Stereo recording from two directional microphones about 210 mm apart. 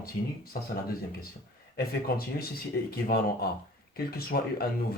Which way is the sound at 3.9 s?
45° left (ahead or behind).